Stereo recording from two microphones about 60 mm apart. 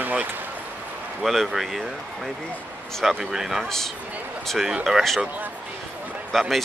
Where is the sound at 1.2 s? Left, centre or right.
Centre.